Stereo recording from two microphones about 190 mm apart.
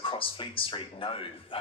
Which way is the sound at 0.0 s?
30° left (ahead or behind).